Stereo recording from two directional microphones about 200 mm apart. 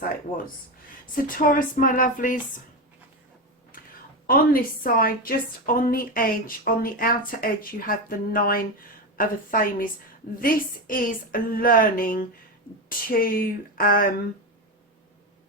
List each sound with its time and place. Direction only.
1.1 s a woman's voice: 45° left (ahead or behind)
3.7 s a sound: 45° left (ahead or behind)
4.3 s a woman's voice: 45° left (ahead or behind)